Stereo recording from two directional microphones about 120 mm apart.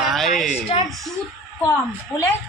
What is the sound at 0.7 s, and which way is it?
Speech, 45° left (ahead or behind).